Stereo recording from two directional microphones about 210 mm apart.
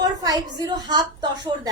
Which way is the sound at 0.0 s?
15° right (ahead or behind).